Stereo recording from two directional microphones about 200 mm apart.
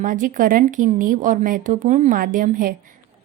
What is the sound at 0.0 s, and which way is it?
A woman's voice, 40° right (ahead or behind).